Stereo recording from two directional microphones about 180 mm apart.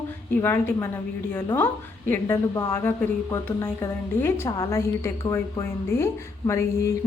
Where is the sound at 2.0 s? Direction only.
15° left (ahead or behind).